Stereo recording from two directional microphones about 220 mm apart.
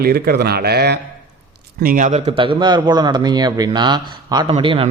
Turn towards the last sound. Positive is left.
turn(degrees=-25)  # may be behind; listen again after turning